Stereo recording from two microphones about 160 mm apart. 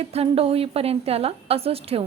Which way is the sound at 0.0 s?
40° right (ahead or behind).